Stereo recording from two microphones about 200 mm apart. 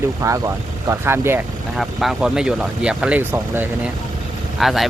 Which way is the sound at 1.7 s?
Centre (ahead or behind).